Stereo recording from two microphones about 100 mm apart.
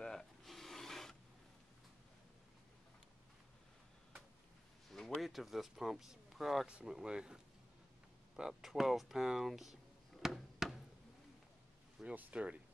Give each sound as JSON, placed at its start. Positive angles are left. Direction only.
{"t": 0.0, "sound": "filing", "side_deg": 5}
{"t": 4.9, "sound": "speech", "side_deg": 0}
{"t": 8.4, "sound": "speech", "side_deg": -5}
{"t": 10.2, "sound": "a sound", "side_deg": -5}
{"t": 12.0, "sound": "speech", "side_deg": -15}